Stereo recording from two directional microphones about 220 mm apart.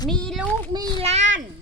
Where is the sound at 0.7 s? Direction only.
25° right (ahead or behind).